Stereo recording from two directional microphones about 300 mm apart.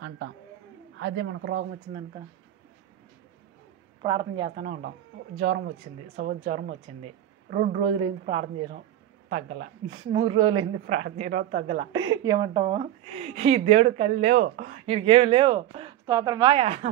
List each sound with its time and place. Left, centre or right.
0.9 s a man's voice: right
4.0 s a woman's voice: centre
10.9 s a woman's voice: right